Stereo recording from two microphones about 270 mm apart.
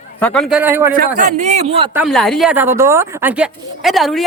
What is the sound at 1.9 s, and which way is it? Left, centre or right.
Speech, centre.